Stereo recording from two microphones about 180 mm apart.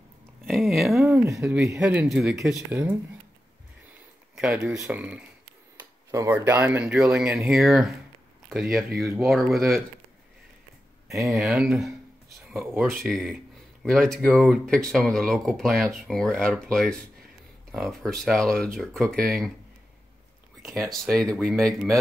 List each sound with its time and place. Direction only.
0.5 s speech: centre (ahead or behind)
2.7 s speech: 15° right (ahead or behind)
4.4 s speech: 5° right (ahead or behind)
11.2 s speech: 5° right (ahead or behind)
20.9 s speech: centre (ahead or behind)